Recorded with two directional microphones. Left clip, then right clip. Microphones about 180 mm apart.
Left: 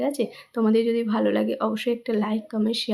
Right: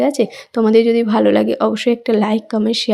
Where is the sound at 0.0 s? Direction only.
35° right (ahead or behind).